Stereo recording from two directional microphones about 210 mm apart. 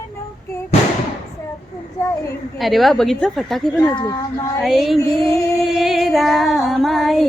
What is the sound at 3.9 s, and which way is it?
Speech, 20° left (ahead or behind).